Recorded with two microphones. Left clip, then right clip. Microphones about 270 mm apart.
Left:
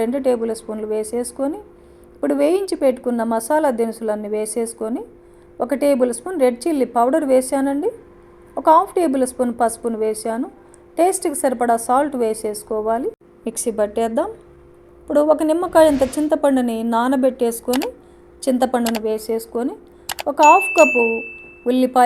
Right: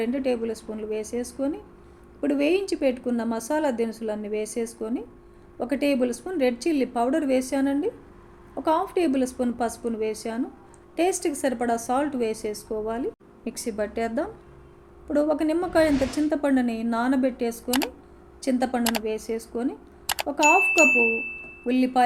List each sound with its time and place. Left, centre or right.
0.0 s a woman's voice: centre
15.7 s speech: centre
16.3 s a woman's voice: centre
17.7 s speech: centre
18.3 s speech: left
18.8 s speech: centre
19.0 s a woman's voice: left
20.1 s a sound: centre
20.4 s speech: centre
21.2 s speech: left